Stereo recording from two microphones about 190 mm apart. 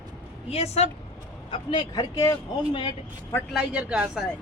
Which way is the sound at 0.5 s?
35° left (ahead or behind).